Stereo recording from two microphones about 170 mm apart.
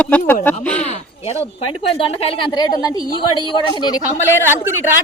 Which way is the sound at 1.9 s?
35° left (ahead or behind).